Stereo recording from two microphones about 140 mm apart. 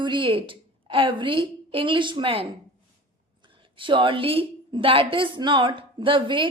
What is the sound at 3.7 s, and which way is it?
A woman's voice, 35° right (ahead or behind).